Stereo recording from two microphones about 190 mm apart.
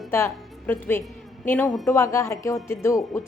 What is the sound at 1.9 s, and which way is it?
A woman's voice, 15° left (ahead or behind).